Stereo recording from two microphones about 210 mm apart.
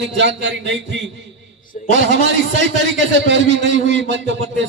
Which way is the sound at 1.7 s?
40° left (ahead or behind).